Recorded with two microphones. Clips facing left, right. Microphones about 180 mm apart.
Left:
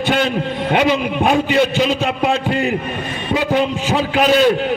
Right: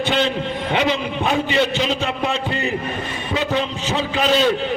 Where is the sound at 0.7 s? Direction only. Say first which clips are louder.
Left 5 dB; 55° left (ahead or behind).